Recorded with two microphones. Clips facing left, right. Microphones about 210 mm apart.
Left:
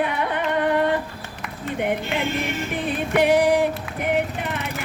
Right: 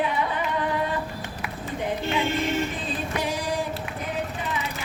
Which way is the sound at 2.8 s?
65° left (ahead or behind).